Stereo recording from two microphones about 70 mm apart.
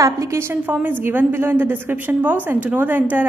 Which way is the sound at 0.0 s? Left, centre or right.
Right.